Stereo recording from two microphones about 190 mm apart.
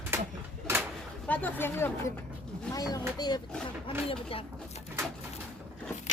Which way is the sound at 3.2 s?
20° left (ahead or behind).